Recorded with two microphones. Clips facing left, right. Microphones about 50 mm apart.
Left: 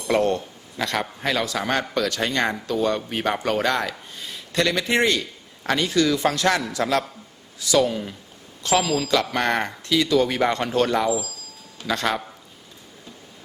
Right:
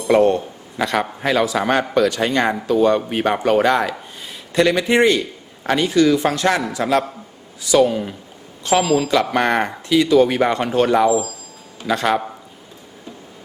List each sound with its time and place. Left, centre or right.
0.1 s a man's voice: centre